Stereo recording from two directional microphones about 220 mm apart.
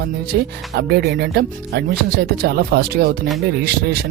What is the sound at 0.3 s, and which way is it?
Speech, 50° right (ahead or behind).